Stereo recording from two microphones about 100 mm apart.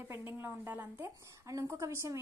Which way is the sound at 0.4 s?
20° right (ahead or behind).